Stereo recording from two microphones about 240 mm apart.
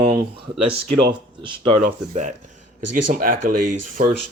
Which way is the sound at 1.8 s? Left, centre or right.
Right.